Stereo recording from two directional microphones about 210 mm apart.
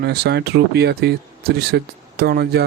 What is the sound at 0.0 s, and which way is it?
Speech, 50° right (ahead or behind).